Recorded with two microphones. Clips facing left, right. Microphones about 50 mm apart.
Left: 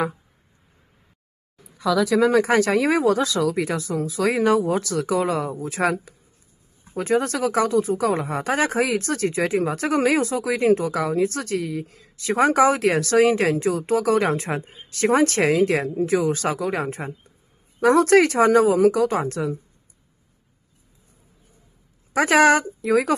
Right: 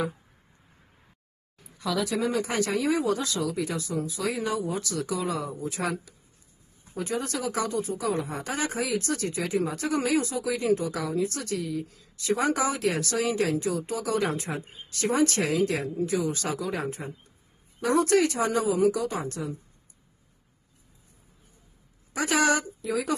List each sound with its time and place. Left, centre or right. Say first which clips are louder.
2.1 s speech: left 12 dB; left
22.1 s speech: left 8 dB; left